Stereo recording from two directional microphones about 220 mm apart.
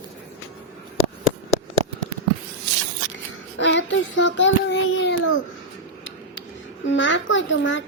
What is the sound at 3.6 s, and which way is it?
Child singing, 55° left (ahead or behind).